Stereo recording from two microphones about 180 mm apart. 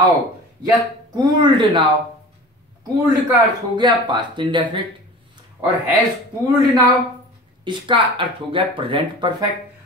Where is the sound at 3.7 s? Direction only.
25° right (ahead or behind).